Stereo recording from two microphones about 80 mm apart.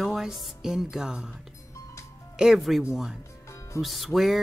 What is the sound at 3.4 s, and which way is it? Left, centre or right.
Music, left.